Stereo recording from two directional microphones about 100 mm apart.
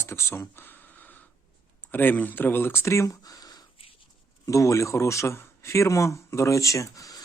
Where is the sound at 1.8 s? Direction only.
20° left (ahead or behind).